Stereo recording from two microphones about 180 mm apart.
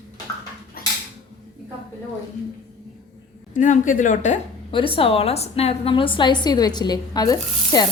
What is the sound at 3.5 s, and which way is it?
Speech, 45° left (ahead or behind).